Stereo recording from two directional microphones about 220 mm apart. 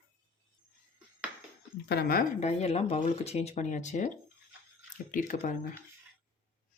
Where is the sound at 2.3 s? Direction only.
30° left (ahead or behind).